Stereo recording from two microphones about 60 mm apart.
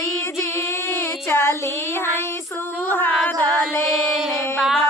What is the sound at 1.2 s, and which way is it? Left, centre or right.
Child singing, left.